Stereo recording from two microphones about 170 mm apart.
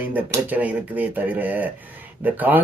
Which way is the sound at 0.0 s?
10° right (ahead or behind).